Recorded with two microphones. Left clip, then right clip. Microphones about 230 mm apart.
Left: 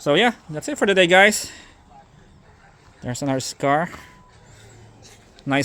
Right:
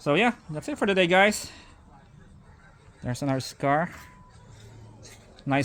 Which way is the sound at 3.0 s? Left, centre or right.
Centre.